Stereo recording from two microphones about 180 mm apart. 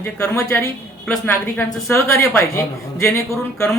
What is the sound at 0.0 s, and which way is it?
A man's voice, 15° left (ahead or behind).